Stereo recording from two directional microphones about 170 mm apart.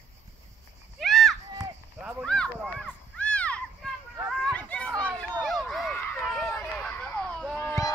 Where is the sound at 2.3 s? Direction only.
5° left (ahead or behind).